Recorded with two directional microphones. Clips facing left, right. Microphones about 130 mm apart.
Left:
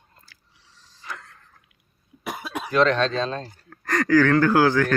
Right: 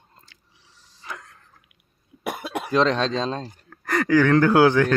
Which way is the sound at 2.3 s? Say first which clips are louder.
Right 2 dB; 60° right (ahead or behind).